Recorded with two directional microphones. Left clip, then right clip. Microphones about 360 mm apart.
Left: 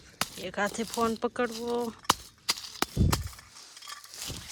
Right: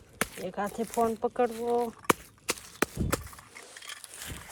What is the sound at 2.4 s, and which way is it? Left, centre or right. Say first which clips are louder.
Chop: even; centre.